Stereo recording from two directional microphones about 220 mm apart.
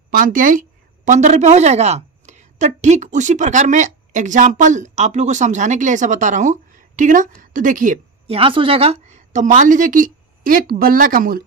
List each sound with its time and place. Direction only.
0.1 s a woman's voice: 40° right (ahead or behind)